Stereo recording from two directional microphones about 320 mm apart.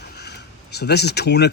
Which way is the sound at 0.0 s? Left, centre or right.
Left.